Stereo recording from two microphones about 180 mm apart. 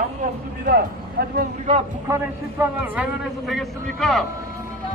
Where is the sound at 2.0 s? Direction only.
15° right (ahead or behind).